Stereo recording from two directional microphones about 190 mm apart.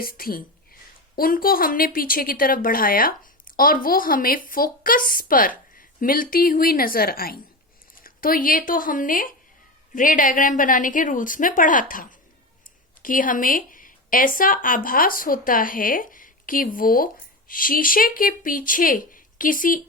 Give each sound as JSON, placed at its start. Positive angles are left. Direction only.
{"t": 0.0, "sound": "a woman's voice", "side_deg": 50}